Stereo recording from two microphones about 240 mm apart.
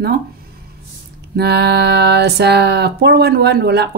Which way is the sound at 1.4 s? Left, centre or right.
Right.